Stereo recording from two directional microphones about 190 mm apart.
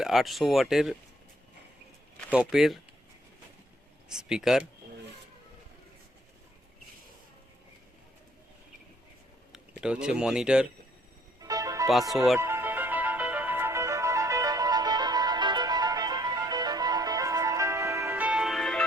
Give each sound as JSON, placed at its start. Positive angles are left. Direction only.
{"t": 0.0, "sound": "speech", "side_deg": 0}
{"t": 2.3, "sound": "speech", "side_deg": -5}
{"t": 4.1, "sound": "speech", "side_deg": -5}
{"t": 9.8, "sound": "speech", "side_deg": -5}
{"t": 11.4, "sound": "music", "side_deg": -20}
{"t": 12.1, "sound": "speech", "side_deg": 0}
{"t": 12.4, "sound": "music", "side_deg": -15}